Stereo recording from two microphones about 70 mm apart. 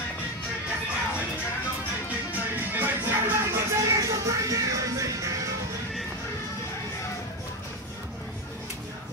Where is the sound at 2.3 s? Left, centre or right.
Right.